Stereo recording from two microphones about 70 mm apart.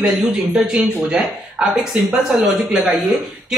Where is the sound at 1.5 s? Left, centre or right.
Centre.